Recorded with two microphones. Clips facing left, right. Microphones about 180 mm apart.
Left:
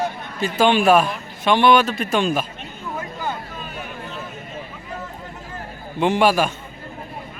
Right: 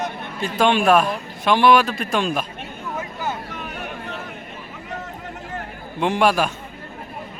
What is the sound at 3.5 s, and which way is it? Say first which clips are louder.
Vehicle: right 1 dB; 65° right (ahead or behind).